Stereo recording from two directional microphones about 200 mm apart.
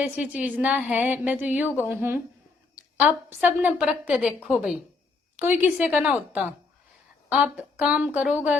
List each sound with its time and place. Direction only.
0.0 s a woman's voice: 5° right (ahead or behind)